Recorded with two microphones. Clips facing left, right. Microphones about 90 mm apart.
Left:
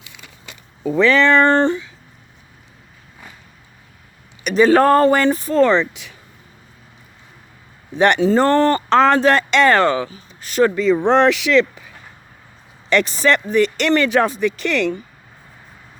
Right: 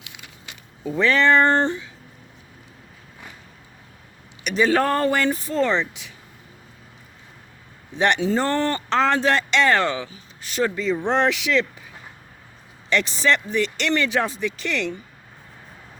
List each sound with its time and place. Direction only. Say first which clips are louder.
0.9 s speech: left 4 dB; 90° left; by 1.9 s 75° left (ahead or behind)
4.4 s speech: left 7 dB; 40° left (ahead or behind)
5.5 s speech: left 8 dB; 60° left (ahead or behind)
7.9 s speech: left 6 dB; 55° left (ahead or behind)
10.8 s speech: left 7 dB; 65° left (ahead or behind)
12.9 s speech: left 5 dB; 50° left (ahead or behind)